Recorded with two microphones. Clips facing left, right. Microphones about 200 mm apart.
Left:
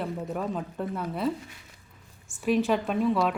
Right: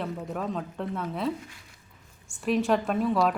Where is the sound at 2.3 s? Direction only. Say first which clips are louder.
Even; centre (ahead or behind).